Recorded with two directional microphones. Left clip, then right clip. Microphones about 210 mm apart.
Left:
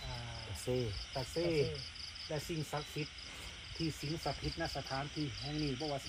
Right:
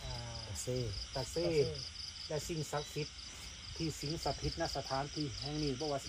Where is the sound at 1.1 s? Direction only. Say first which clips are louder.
Right 1 dB; 5° left (ahead or behind).